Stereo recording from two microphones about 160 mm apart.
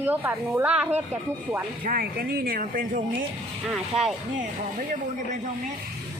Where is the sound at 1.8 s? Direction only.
65° right (ahead or behind).